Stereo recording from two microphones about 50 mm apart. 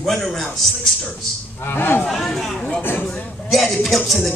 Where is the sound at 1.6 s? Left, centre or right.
Left.